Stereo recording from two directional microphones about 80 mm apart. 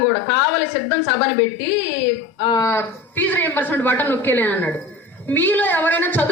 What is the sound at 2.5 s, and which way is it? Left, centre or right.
Speech, left.